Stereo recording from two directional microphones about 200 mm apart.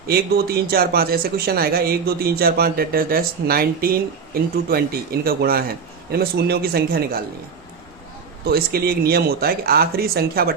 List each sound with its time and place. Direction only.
0.1 s speech: 50° right (ahead or behind)
8.4 s speech: 50° right (ahead or behind)